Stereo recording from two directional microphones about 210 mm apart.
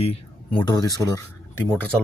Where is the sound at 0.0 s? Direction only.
30° left (ahead or behind).